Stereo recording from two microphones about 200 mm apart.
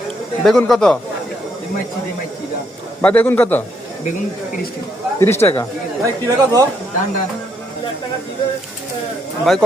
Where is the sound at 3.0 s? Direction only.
10° left (ahead or behind).